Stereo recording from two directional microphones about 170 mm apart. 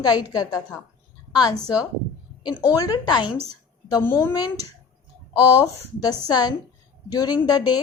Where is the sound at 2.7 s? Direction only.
20° left (ahead or behind).